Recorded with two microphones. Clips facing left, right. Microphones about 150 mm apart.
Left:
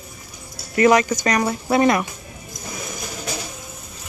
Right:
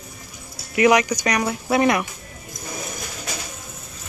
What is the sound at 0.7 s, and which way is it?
Speech, 10° right (ahead or behind).